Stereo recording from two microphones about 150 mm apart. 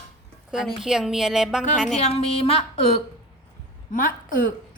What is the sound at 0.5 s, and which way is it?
A woman's voice, 5° right (ahead or behind).